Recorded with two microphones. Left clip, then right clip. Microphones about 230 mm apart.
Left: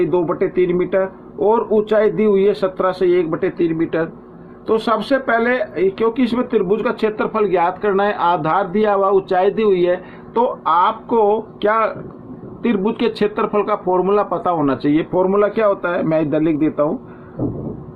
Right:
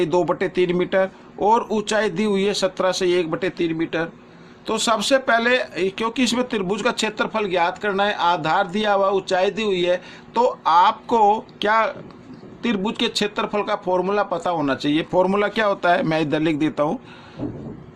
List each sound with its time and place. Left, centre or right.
0.0 s speech: right